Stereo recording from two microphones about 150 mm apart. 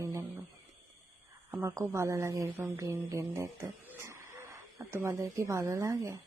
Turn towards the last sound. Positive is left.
turn(degrees=-20)  # may be behind; listen again after turning